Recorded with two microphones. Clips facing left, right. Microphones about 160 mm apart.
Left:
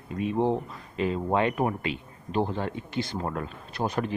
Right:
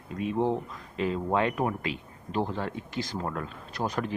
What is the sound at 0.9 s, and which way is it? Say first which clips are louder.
Speech: left 1 dB; centre (ahead or behind).